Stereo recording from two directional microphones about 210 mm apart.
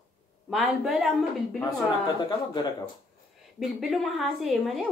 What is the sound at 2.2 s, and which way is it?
Speech, 20° left (ahead or behind).